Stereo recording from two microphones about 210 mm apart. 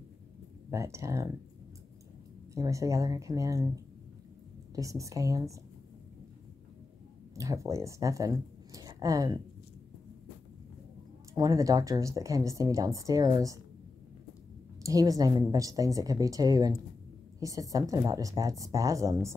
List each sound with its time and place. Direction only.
0.7 s speech: 15° right (ahead or behind)
2.5 s speech: 15° right (ahead or behind)
7.3 s speech: 15° right (ahead or behind)
11.3 s speech: 15° right (ahead or behind)
14.8 s speech: 15° right (ahead or behind)